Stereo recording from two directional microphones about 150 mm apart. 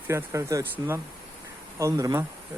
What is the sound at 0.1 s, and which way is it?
Speech, 15° right (ahead or behind).